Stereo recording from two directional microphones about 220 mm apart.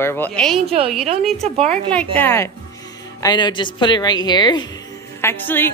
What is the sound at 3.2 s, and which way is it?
A woman's voice, 20° left (ahead or behind).